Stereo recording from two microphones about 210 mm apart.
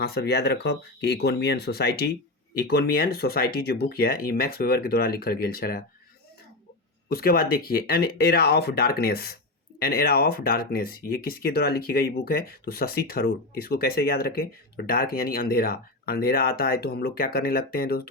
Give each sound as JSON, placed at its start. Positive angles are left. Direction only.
{"t": 0.0, "sound": "speech", "side_deg": 50}
{"t": 7.1, "sound": "speech", "side_deg": 45}